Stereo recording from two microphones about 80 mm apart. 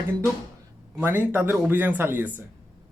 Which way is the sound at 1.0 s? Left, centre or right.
Right.